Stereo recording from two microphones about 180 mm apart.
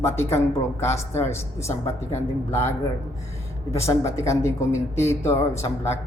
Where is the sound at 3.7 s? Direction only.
15° left (ahead or behind).